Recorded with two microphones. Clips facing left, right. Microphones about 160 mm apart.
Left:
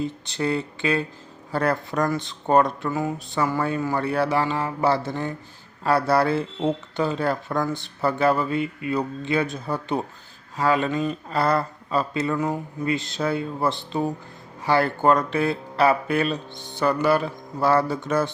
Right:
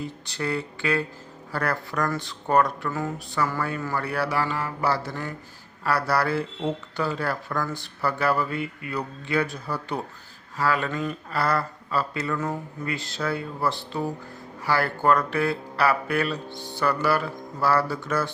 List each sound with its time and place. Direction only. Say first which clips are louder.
0.0 s speech: left 5 dB; 25° left (ahead or behind)